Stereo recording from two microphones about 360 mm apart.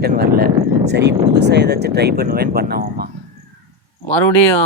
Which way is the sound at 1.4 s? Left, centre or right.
Right.